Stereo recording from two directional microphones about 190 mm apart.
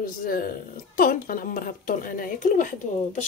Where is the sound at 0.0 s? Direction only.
50° left (ahead or behind).